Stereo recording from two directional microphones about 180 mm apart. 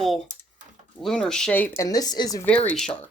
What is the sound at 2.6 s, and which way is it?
Speech, 5° left (ahead or behind).